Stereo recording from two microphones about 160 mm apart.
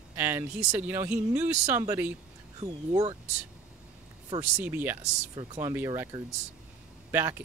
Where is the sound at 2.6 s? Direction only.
30° right (ahead or behind).